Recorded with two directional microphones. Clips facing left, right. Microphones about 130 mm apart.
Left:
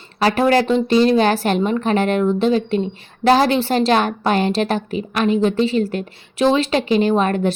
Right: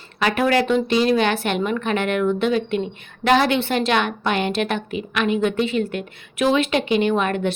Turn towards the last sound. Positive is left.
turn(degrees=35)  # may be behind; listen again after turning